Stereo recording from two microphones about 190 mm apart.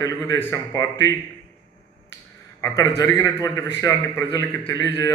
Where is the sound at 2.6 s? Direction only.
15° left (ahead or behind).